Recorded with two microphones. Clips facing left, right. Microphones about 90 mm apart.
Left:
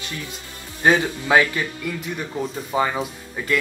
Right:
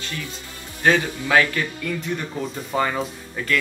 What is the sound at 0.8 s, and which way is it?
Speech, 20° left (ahead or behind).